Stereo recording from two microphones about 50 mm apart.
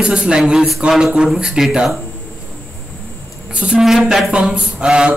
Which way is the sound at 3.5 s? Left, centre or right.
Centre.